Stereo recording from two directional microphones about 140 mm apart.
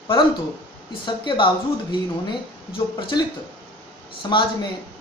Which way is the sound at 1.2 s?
35° left (ahead or behind).